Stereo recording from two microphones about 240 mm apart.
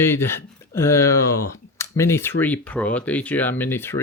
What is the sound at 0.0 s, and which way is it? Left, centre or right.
Speech, centre.